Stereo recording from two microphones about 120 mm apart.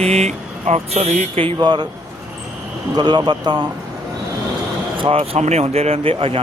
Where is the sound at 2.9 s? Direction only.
35° right (ahead or behind).